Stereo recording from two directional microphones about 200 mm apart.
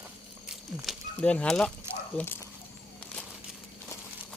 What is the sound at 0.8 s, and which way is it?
Speech, 5° left (ahead or behind).